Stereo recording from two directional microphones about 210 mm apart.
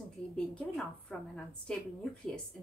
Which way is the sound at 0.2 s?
5° left (ahead or behind).